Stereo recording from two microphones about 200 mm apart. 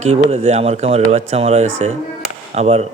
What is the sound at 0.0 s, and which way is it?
A man's voice, 30° right (ahead or behind).